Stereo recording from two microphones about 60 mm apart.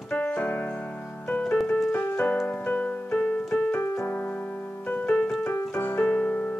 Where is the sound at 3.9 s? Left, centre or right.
Left.